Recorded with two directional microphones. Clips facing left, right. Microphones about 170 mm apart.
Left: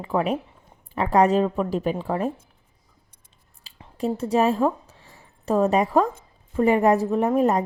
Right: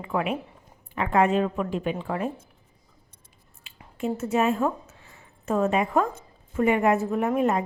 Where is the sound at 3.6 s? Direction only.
35° left (ahead or behind).